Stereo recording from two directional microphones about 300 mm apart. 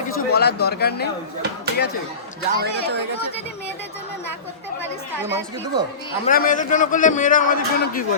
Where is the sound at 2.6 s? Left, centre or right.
Right.